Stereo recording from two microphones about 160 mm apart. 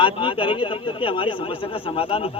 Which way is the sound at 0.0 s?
30° left (ahead or behind).